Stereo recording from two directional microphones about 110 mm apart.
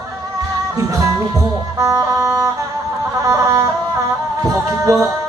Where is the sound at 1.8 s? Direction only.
30° right (ahead or behind).